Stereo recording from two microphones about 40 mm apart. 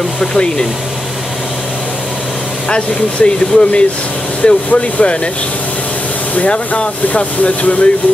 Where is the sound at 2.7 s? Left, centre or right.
Left.